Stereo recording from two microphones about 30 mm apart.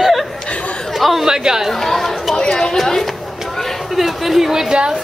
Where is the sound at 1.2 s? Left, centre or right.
Centre.